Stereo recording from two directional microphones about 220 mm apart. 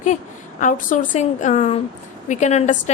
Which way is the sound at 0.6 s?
35° left (ahead or behind).